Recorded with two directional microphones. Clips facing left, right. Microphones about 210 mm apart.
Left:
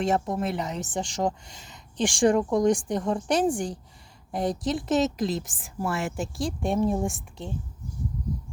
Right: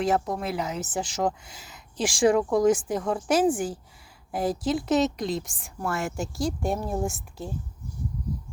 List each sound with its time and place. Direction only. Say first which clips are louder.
0.0 s speech: even; centre (ahead or behind)